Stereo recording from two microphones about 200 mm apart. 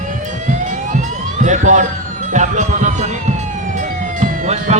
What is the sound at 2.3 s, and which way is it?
Music, 35° right (ahead or behind).